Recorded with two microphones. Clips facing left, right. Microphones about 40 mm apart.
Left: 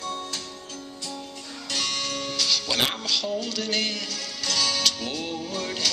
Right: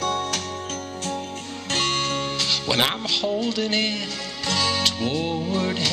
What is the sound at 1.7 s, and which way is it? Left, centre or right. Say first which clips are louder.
Music: right 5 dB; right.